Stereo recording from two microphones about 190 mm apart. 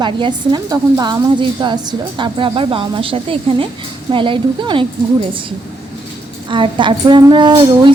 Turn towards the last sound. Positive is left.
turn(degrees=-25)  # may be behind; listen again after turning